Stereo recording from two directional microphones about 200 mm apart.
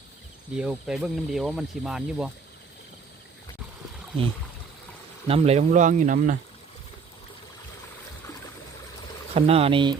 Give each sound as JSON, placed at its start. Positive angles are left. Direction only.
{"t": 0.5, "sound": "speech", "side_deg": -5}
{"t": 5.3, "sound": "speech", "side_deg": -30}
{"t": 9.3, "sound": "speech", "side_deg": -30}